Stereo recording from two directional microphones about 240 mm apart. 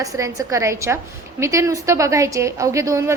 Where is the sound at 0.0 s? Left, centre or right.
Centre.